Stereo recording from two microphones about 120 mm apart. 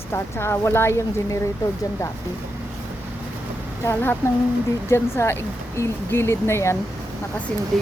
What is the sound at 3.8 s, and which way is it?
Speech, 15° left (ahead or behind).